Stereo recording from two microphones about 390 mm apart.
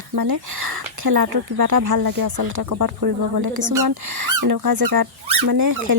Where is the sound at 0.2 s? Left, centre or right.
Right.